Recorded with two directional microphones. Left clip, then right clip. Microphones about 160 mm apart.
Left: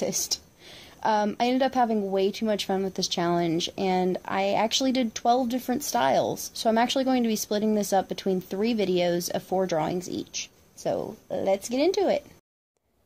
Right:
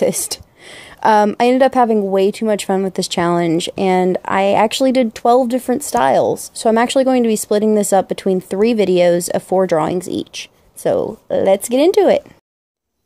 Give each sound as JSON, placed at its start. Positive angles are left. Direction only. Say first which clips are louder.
{"t": 0.0, "sound": "speech", "louder": "right 11 dB", "side_deg": -60}